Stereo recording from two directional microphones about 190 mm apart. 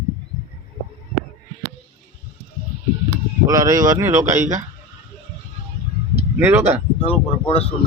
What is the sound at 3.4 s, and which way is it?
A man's voice, 20° right (ahead or behind).